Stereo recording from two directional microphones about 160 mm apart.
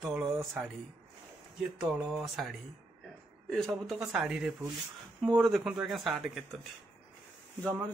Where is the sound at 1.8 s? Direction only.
10° right (ahead or behind).